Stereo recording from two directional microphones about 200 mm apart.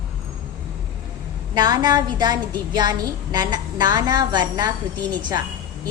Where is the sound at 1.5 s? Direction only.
20° right (ahead or behind).